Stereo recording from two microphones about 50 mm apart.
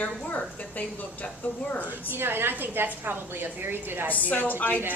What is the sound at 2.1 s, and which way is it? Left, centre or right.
A woman's voice, right.